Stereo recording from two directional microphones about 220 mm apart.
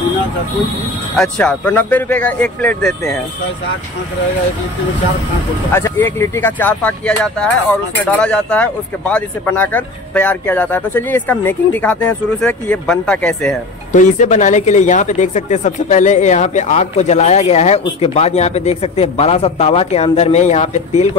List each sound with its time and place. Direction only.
1.1 s speech: 5° left (ahead or behind)
5.7 s speech: 10° left (ahead or behind)
13.9 s speech: 35° left (ahead or behind)